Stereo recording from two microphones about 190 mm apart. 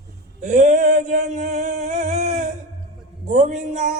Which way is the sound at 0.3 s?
40° right (ahead or behind).